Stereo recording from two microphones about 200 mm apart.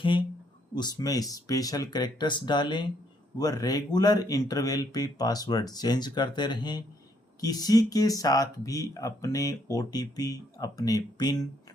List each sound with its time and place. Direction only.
0.8 s speech: 20° left (ahead or behind)